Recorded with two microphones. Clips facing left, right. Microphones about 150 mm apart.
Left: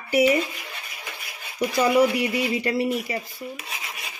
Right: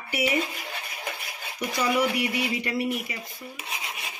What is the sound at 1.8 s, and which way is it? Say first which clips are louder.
Speech: left 5 dB; 35° left (ahead or behind).